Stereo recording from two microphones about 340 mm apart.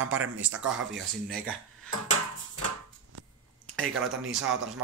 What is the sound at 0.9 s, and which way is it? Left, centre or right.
Speech, centre.